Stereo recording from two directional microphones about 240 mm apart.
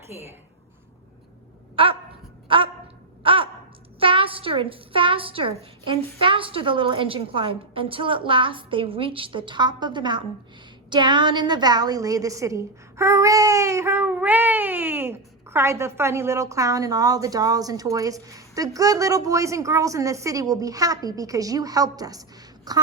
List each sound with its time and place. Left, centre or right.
1.7 s dog: right
2.5 s a sound: right
4.0 s a woman's voice: right